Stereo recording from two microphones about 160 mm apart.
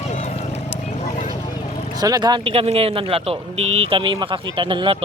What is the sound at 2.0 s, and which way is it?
Speech, 25° right (ahead or behind).